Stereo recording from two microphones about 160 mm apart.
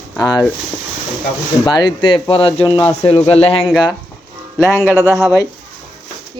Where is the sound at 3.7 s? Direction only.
5° right (ahead or behind).